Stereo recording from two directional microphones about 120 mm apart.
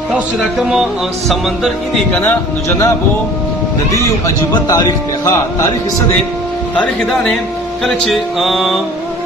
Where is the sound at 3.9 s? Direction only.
30° left (ahead or behind).